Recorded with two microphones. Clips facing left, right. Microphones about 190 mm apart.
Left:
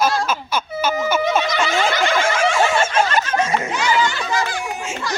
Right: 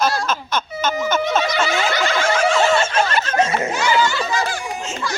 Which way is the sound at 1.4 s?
50° left (ahead or behind).